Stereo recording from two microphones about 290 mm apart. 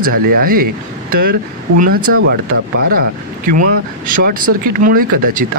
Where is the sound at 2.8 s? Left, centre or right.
Right.